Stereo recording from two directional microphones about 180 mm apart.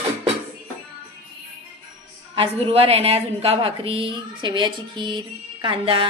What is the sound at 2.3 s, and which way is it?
A woman's voice, 30° right (ahead or behind).